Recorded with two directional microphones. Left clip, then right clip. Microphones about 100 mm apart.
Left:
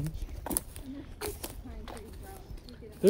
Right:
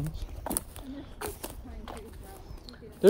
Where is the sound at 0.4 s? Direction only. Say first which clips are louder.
Right 2 dB; 5° left (ahead or behind); by 3.0 s 10° right (ahead or behind).